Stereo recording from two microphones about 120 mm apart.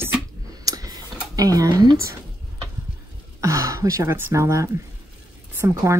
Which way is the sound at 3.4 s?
25° right (ahead or behind).